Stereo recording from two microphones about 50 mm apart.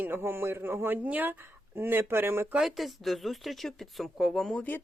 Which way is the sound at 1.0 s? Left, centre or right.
Right.